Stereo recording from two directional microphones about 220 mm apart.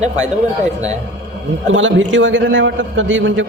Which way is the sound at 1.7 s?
60° right (ahead or behind).